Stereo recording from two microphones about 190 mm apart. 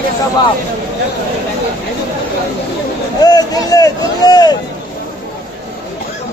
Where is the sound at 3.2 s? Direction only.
20° left (ahead or behind).